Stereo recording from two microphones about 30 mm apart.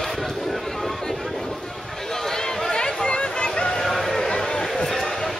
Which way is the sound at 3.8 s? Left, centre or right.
Centre.